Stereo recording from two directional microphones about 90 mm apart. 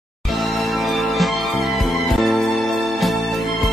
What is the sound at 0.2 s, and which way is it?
Music, centre (ahead or behind).